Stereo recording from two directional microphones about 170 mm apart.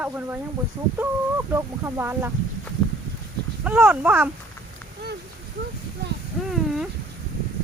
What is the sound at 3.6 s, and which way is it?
Speech, 10° right (ahead or behind).